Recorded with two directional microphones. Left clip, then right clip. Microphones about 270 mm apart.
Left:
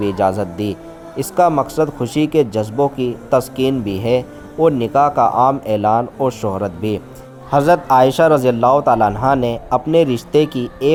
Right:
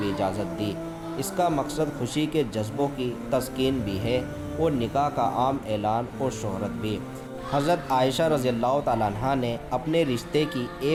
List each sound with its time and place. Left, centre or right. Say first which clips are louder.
0.0 s a man's voice: left 11 dB; left